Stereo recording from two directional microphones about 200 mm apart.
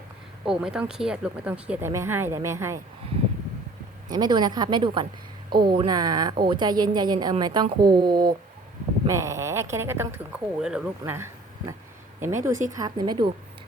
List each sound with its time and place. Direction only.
0.4 s speech: 5° right (ahead or behind)
4.1 s a woman's voice: 20° right (ahead or behind)